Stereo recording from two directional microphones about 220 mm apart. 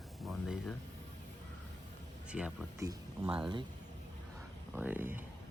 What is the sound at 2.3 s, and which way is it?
Speech, 5° right (ahead or behind).